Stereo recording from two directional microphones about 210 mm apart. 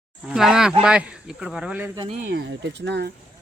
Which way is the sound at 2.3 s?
55° right (ahead or behind).